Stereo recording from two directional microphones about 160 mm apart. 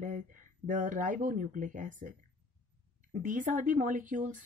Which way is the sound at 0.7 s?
55° right (ahead or behind).